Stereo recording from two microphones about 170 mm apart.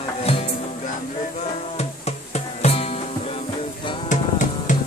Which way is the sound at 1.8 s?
40° left (ahead or behind).